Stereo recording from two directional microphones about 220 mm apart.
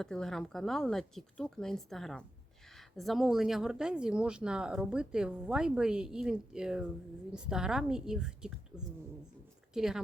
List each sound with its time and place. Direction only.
0.0 s speech: centre (ahead or behind)